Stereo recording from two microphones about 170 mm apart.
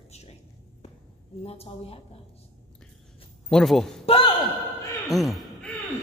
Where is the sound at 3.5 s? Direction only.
Centre (ahead or behind).